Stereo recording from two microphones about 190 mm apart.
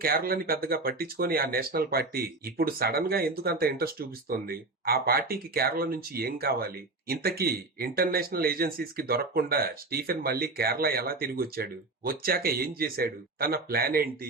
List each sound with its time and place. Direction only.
0.0 s speech: 50° right (ahead or behind)